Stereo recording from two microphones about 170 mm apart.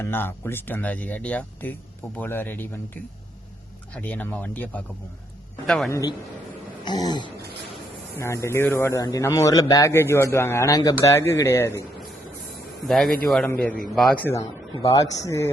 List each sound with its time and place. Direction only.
0.0 s speech: 10° left (ahead or behind)
5.9 s speech: 20° left (ahead or behind)
12.9 s speech: 5° left (ahead or behind)
14.3 s speech: 20° left (ahead or behind)